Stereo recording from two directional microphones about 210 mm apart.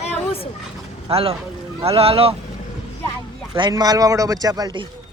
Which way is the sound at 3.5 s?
20° right (ahead or behind).